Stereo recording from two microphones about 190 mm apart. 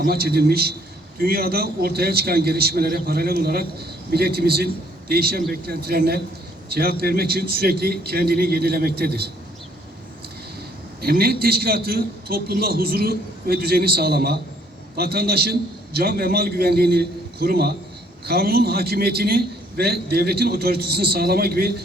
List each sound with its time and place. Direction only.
0.0 s a man's voice: 55° right (ahead or behind)
11.0 s a man's voice: 55° right (ahead or behind)